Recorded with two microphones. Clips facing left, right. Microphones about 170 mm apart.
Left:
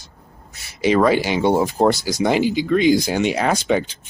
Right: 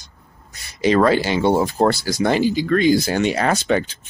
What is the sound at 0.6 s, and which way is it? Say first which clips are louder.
Speech: even; 5° left (ahead or behind).